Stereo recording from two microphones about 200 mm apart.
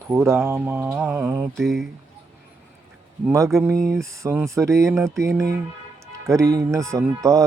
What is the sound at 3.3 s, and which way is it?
Speech, 15° right (ahead or behind).